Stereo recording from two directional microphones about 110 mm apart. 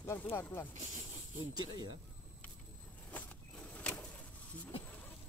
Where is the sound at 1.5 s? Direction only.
35° right (ahead or behind).